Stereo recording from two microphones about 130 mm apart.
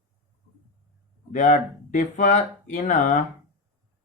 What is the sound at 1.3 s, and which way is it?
Speech, 70° left (ahead or behind).